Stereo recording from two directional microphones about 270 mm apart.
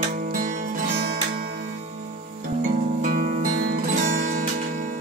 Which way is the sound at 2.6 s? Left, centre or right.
Right.